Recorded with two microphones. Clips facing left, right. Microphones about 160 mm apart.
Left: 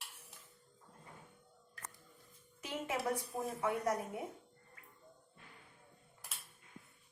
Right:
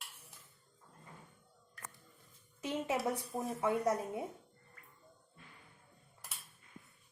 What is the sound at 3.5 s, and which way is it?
Speech, 20° right (ahead or behind).